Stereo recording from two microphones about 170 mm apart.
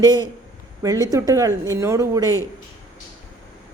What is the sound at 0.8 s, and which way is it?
Speech, 20° right (ahead or behind).